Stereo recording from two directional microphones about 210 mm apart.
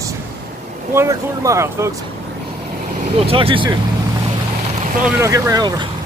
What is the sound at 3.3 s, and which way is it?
Speech, 25° right (ahead or behind).